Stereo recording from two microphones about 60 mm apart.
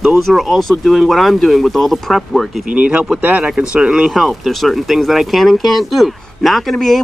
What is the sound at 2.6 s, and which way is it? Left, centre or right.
Speech, right.